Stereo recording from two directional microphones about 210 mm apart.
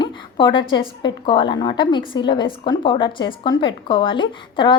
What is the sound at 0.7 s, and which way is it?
A woman's voice, 25° left (ahead or behind).